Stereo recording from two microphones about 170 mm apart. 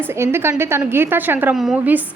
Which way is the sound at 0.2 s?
15° right (ahead or behind).